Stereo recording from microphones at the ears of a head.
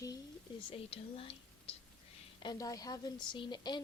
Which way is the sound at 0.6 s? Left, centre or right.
Left.